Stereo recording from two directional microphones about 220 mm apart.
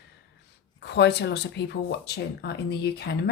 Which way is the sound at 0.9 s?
50° left (ahead or behind).